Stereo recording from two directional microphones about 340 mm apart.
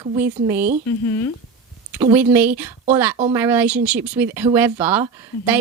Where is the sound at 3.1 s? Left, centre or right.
Centre.